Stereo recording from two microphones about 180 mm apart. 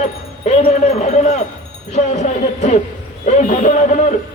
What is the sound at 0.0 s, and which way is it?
Wind chime, 35° left (ahead or behind).